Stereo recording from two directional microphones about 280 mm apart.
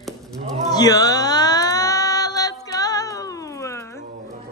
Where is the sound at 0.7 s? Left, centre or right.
Centre.